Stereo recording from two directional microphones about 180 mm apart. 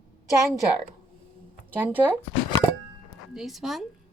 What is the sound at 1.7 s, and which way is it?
Speech, 10° right (ahead or behind).